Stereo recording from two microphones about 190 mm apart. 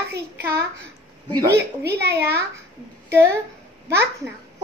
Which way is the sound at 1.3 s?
20° right (ahead or behind).